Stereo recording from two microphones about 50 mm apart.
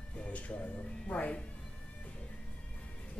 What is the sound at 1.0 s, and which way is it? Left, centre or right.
Speech, left.